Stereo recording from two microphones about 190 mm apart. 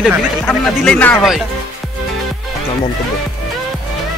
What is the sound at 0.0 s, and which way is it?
Speech, 5° left (ahead or behind).